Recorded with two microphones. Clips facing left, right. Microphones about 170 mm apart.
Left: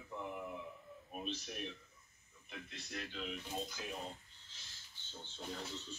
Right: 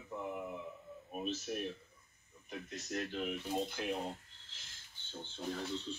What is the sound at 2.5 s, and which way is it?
Speech, 40° right (ahead or behind).